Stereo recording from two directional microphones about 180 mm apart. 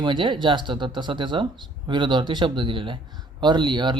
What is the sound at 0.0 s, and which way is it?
Speech, 25° right (ahead or behind).